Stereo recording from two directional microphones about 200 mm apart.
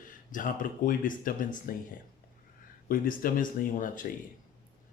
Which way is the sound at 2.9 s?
45° left (ahead or behind).